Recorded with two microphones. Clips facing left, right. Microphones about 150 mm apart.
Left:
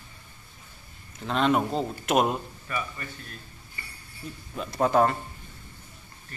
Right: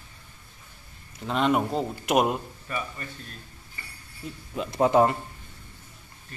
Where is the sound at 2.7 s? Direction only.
30° right (ahead or behind).